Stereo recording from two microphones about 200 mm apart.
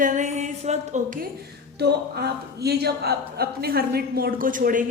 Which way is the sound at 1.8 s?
55° right (ahead or behind).